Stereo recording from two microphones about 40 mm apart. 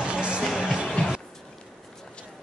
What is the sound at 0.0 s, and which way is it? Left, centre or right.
Music, right.